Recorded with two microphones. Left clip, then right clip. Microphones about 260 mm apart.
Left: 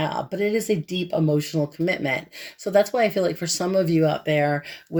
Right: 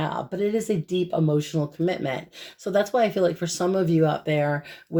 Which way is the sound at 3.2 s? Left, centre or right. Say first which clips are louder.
Right 1 dB; left.